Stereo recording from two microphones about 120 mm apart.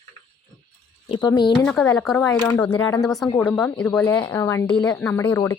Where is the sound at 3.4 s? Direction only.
15° left (ahead or behind).